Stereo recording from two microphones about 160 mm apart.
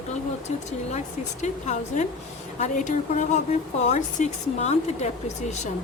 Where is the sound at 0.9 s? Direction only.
45° left (ahead or behind).